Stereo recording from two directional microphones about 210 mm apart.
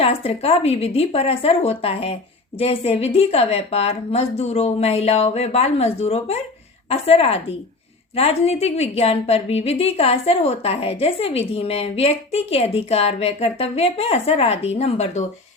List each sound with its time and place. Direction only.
0.0 s a woman's voice: 30° left (ahead or behind)